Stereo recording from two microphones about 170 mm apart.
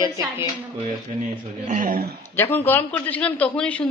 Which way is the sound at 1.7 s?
55° right (ahead or behind).